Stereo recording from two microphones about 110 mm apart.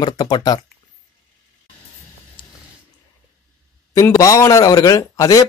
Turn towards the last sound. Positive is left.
turn(degrees=30)  # may be behind; listen again after turning